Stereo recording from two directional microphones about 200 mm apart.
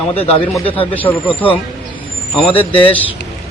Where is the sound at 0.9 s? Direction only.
10° left (ahead or behind).